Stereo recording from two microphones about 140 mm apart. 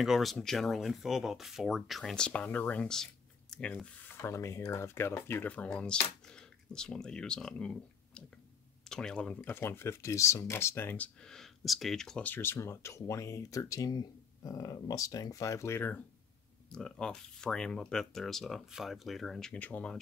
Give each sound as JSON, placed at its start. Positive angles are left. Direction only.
{"t": 0.0, "sound": "speech", "side_deg": 0}